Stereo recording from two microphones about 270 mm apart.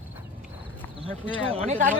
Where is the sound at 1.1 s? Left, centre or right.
Centre.